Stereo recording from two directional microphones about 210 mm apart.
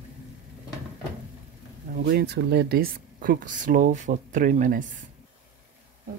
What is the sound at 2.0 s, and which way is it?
Speech, 50° right (ahead or behind).